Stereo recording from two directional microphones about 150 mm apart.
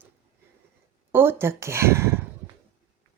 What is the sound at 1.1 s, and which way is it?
Speech, 15° right (ahead or behind).